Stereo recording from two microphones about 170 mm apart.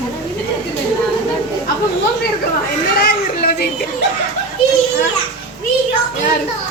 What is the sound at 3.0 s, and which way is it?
Speech, 65° left (ahead or behind).